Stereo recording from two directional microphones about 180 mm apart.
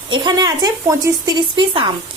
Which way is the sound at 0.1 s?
20° right (ahead or behind).